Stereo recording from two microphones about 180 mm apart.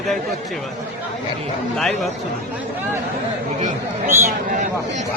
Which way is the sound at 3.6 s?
45° right (ahead or behind).